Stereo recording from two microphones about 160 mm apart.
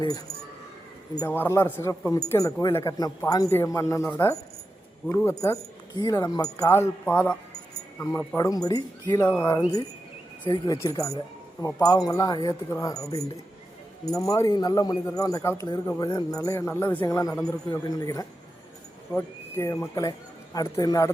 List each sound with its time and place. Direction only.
1.3 s speech: 15° left (ahead or behind)
7.0 s speech: 10° left (ahead or behind)
8.4 s speech: 25° left (ahead or behind)